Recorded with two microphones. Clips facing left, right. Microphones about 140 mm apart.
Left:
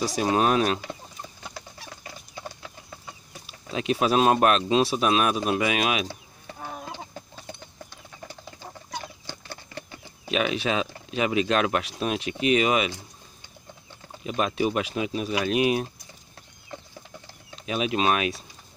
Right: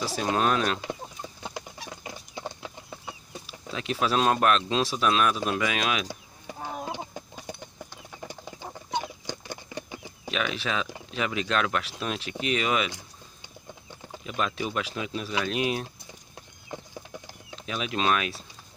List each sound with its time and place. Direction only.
0.2 s speech: 15° left (ahead or behind)
1.5 s chicken: 20° right (ahead or behind)
3.4 s speech: 20° left (ahead or behind)
6.0 s chicken: 15° right (ahead or behind)
8.3 s horse: 15° right (ahead or behind)
10.3 s speech: 20° left (ahead or behind)
14.2 s speech: 15° left (ahead or behind)
17.6 s speech: 20° left (ahead or behind)